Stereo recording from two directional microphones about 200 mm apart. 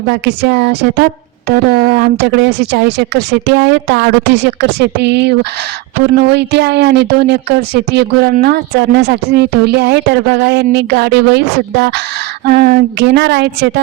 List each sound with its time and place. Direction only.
0.1 s speech: 55° right (ahead or behind)